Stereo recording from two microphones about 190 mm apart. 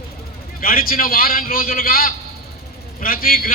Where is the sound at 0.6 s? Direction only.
50° left (ahead or behind).